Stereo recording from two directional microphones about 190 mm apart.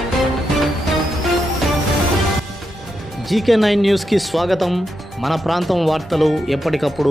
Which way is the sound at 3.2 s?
Centre (ahead or behind).